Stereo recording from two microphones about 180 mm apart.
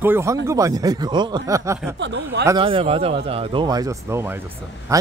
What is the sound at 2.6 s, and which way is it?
Speech, 30° right (ahead or behind).